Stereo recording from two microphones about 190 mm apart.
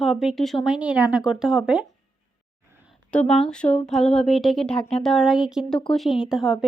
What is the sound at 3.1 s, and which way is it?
Speech, 5° left (ahead or behind).